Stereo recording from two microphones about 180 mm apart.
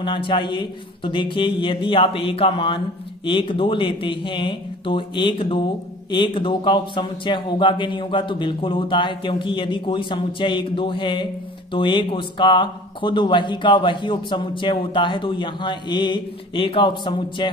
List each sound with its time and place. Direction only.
0.0 s speech: 30° left (ahead or behind)